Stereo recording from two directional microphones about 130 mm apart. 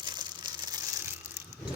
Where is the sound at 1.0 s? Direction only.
20° right (ahead or behind).